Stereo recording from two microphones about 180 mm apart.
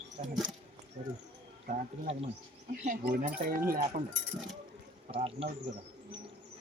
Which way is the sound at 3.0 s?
60° right (ahead or behind).